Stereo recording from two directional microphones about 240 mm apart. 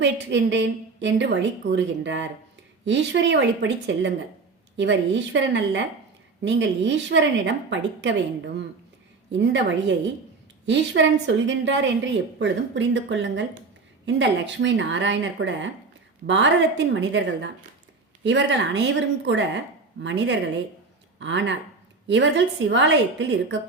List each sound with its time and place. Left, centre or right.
0.0 s a woman's voice: right
9.4 s a woman's voice: right